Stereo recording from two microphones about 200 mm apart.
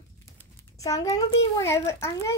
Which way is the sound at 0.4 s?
15° left (ahead or behind).